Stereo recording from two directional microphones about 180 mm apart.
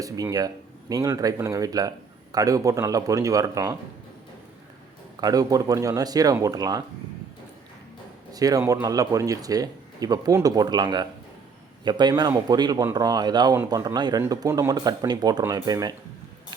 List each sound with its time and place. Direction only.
0.0 s speech: 20° right (ahead or behind)
5.2 s speech: 20° right (ahead or behind)
8.3 s speech: 20° right (ahead or behind)